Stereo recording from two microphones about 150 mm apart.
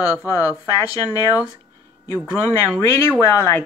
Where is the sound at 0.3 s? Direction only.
20° left (ahead or behind).